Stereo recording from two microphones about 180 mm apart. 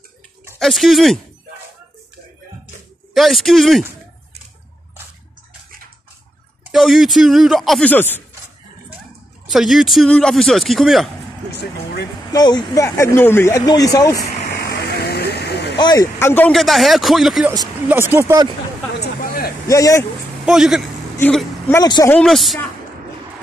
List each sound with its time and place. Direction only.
0.6 s speech: centre (ahead or behind)
3.2 s speech: centre (ahead or behind)
6.6 s speech: centre (ahead or behind)
9.5 s speech: centre (ahead or behind)
12.3 s speech: 25° left (ahead or behind)
14.5 s vehicle: 65° left (ahead or behind)
15.8 s speech: 20° left (ahead or behind); by 17.5 s centre (ahead or behind)
17.5 s speech: 15° right (ahead or behind)
18.9 s a sound: 55° left (ahead or behind)
19.7 s speech: 15° left (ahead or behind)
20.4 s speech: 5° right (ahead or behind)
21.2 s speech: 5° left (ahead or behind)
21.8 s speech: 25° left (ahead or behind)
22.1 s speech: centre (ahead or behind)